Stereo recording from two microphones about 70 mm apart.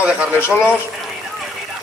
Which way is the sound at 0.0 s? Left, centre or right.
Centre.